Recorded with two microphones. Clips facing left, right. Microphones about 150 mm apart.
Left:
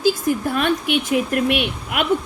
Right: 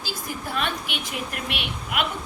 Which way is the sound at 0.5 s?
50° left (ahead or behind).